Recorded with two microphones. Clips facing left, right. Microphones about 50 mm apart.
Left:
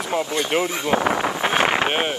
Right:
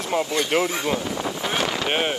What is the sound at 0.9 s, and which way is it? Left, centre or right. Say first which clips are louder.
Speech: left 5 dB; left.